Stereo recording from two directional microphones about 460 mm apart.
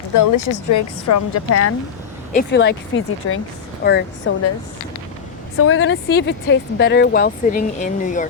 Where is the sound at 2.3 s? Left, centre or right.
Left.